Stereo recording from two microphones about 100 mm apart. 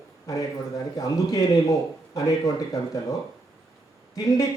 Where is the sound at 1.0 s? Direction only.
35° left (ahead or behind).